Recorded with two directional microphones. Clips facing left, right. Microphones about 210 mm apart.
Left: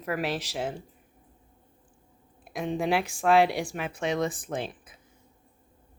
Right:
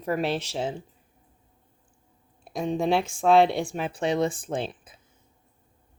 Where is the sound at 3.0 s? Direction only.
25° right (ahead or behind).